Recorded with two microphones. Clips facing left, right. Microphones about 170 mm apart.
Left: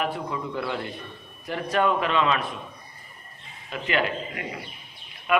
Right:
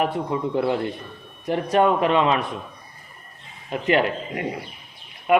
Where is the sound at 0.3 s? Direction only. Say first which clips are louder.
Right 7 dB; 30° right (ahead or behind).